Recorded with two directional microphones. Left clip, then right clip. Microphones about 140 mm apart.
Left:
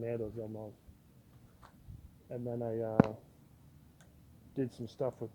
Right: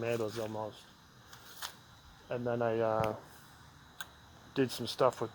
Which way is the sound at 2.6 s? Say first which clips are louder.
Right 6 dB; 10° right (ahead or behind).